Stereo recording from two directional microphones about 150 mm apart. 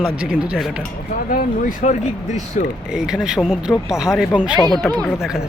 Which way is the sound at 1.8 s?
50° left (ahead or behind).